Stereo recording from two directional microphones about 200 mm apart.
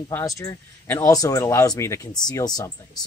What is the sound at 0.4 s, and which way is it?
Speech, 15° left (ahead or behind).